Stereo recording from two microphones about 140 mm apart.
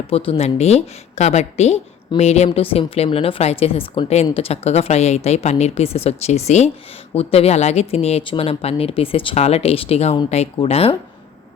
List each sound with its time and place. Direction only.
0.1 s a woman's voice: 40° left (ahead or behind)